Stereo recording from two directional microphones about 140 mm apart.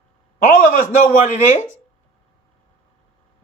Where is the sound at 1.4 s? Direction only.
55° left (ahead or behind).